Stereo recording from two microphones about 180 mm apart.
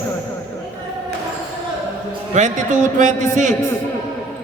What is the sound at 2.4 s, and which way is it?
Speech, 40° right (ahead or behind).